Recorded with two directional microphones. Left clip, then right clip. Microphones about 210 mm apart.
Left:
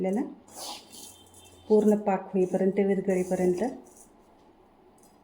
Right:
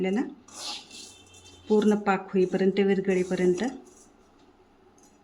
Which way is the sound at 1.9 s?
25° right (ahead or behind).